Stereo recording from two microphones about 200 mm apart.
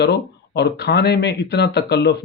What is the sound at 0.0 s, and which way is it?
Speech, 55° left (ahead or behind).